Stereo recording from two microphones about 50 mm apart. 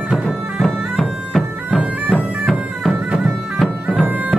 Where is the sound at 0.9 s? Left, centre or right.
Centre.